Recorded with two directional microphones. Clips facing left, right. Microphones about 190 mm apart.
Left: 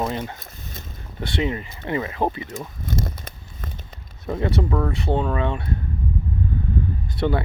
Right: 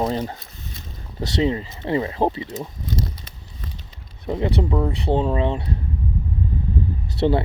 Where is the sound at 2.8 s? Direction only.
50° left (ahead or behind).